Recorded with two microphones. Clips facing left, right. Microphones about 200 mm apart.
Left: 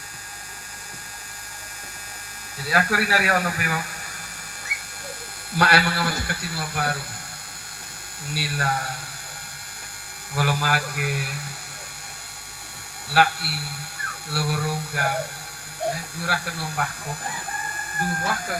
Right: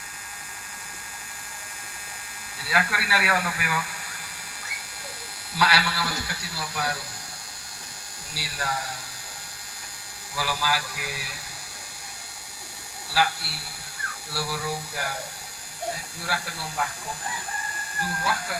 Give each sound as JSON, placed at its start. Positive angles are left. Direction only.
{"t": 2.6, "sound": "a man's voice", "side_deg": 40}
{"t": 5.5, "sound": "a man's voice", "side_deg": 50}
{"t": 8.3, "sound": "a man's voice", "side_deg": 60}
{"t": 10.3, "sound": "a man's voice", "side_deg": 55}
{"t": 13.1, "sound": "a man's voice", "side_deg": 60}
{"t": 16.2, "sound": "a man's voice", "side_deg": 60}
{"t": 18.2, "sound": "a man's voice", "side_deg": 50}